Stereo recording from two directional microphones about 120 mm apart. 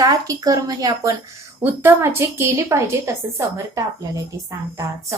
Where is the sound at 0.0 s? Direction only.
30° right (ahead or behind).